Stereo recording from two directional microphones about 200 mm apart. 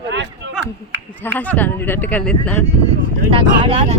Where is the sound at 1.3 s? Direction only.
10° left (ahead or behind).